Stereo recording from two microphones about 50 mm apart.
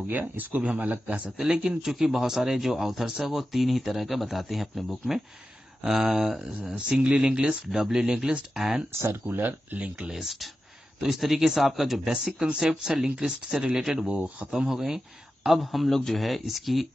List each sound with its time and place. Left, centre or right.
0.1 s a man's voice: right
1.6 s speech: centre
6.9 s speech: right
9.2 s speech: right
10.1 s speech: centre
12.4 s speech: centre
14.1 s a man's voice: right
14.5 s speech: centre